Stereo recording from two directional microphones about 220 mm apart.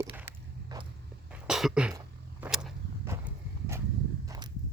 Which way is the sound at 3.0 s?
10° right (ahead or behind).